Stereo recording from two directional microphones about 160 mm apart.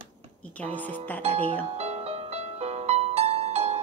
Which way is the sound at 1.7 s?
40° right (ahead or behind).